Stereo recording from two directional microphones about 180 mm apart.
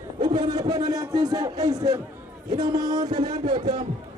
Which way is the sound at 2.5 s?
20° right (ahead or behind).